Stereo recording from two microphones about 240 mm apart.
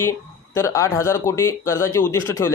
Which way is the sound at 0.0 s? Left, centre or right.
Centre.